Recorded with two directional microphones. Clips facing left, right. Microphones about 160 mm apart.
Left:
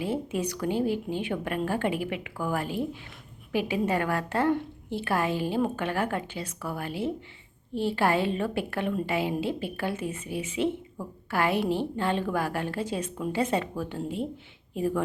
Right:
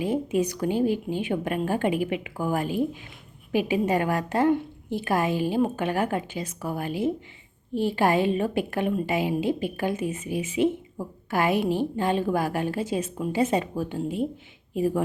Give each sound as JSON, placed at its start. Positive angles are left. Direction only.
{"t": 0.0, "sound": "speech", "side_deg": -15}